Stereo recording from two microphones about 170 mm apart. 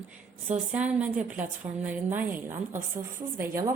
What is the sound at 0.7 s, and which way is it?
A woman's voice, 10° right (ahead or behind).